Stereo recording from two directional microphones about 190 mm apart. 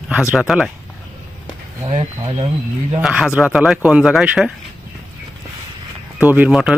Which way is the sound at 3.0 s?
5° right (ahead or behind).